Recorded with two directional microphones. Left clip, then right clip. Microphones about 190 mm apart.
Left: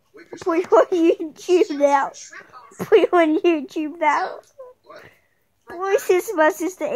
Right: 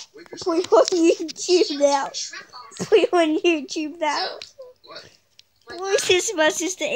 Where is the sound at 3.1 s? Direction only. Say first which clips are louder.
Left 2 dB; 35° left (ahead or behind).